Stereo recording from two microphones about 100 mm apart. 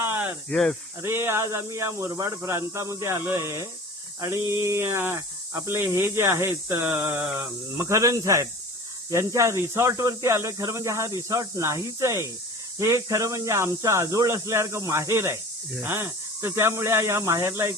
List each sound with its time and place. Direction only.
0.0 s snake: 20° right (ahead or behind)
0.5 s speech: 5° left (ahead or behind)
1.0 s speech: 25° right (ahead or behind)
7.7 s speech: 30° right (ahead or behind)